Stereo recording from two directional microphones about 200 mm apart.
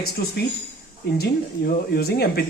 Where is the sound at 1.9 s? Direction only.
50° left (ahead or behind).